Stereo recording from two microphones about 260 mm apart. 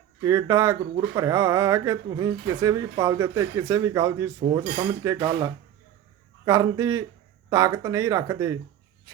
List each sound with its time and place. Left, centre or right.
0.2 s speech: centre